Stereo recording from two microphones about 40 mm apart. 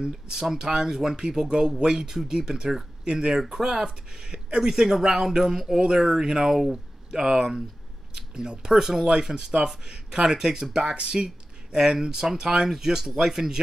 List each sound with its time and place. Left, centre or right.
0.0 s speech: centre